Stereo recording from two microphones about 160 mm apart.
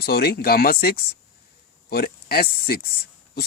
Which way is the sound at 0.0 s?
75° left (ahead or behind).